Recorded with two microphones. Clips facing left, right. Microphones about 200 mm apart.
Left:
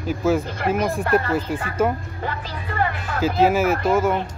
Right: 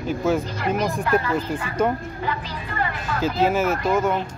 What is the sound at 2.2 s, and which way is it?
Music, 50° left (ahead or behind).